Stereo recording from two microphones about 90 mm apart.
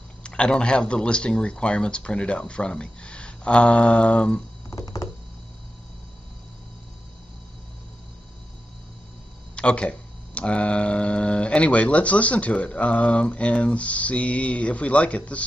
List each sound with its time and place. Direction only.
0.2 s speech: 10° left (ahead or behind)
4.6 s computer keyboard: 45° left (ahead or behind)
9.6 s speech: 10° left (ahead or behind)